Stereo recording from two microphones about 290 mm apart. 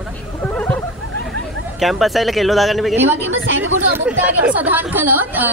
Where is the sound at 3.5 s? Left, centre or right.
Right.